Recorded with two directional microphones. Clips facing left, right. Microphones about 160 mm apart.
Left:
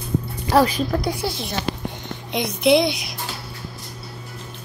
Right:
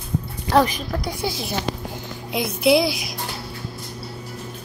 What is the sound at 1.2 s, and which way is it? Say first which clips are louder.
Speech: even; centre (ahead or behind).